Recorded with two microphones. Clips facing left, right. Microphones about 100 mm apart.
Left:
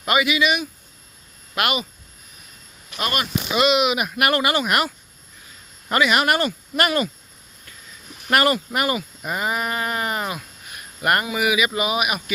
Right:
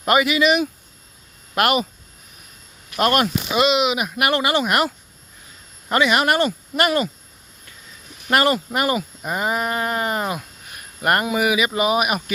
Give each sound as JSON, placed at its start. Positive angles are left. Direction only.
{"t": 0.0, "sound": "speech", "side_deg": -45}
{"t": 3.0, "sound": "speech", "side_deg": -60}
{"t": 3.5, "sound": "speech", "side_deg": -30}
{"t": 5.9, "sound": "speech", "side_deg": -25}
{"t": 8.3, "sound": "speech", "side_deg": -25}